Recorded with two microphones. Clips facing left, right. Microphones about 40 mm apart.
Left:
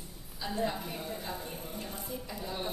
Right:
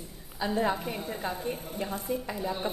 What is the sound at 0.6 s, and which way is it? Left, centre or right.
A woman's voice, right.